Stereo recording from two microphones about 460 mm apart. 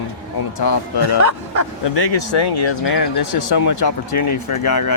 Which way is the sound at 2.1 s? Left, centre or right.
Left.